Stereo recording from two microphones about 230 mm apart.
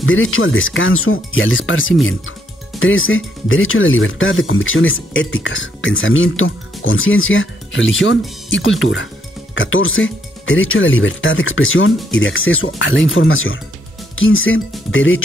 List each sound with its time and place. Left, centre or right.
0.0 s speech: left